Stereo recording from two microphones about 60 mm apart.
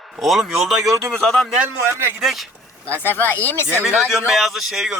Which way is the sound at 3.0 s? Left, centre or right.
Left.